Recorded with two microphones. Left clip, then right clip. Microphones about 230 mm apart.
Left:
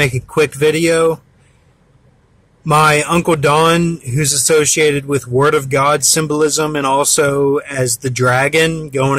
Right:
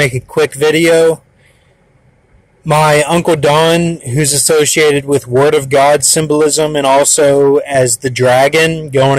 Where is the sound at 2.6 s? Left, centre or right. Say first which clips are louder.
Right 2 dB; centre.